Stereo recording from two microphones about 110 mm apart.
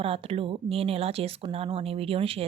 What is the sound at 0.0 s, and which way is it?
Speech, 60° right (ahead or behind).